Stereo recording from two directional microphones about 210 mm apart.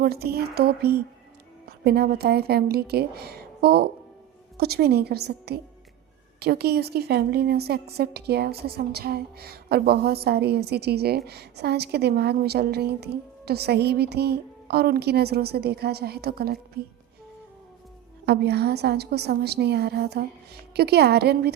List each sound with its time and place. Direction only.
0.0 s a woman's voice: 50° right (ahead or behind)
18.3 s a woman's voice: 50° right (ahead or behind)